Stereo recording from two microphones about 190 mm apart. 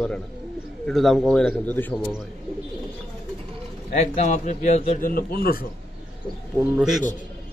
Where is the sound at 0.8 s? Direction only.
Centre (ahead or behind).